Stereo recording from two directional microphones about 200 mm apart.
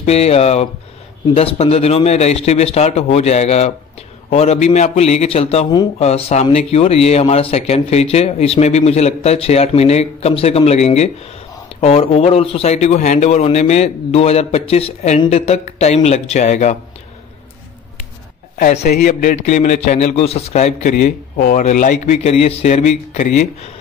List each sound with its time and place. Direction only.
0.0 s speech: 30° left (ahead or behind)
18.8 s speech: 50° left (ahead or behind)